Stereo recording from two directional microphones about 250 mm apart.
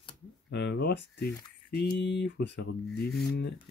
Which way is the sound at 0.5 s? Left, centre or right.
Left.